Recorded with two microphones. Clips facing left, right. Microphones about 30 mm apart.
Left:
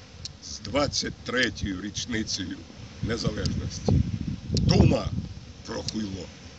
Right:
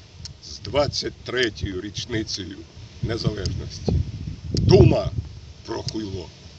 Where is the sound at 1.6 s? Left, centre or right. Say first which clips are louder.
Right 2 dB; centre.